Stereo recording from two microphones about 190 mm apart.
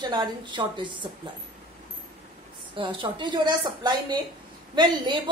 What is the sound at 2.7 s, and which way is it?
A woman's voice, 25° right (ahead or behind).